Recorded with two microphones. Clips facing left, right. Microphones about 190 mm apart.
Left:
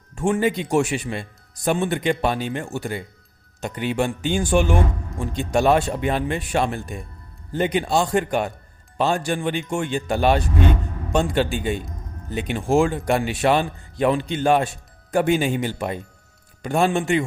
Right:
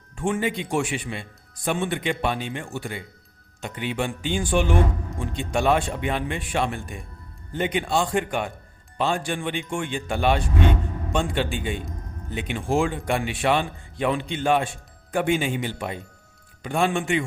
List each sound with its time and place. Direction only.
0.2 s a man's voice: 40° left (ahead or behind)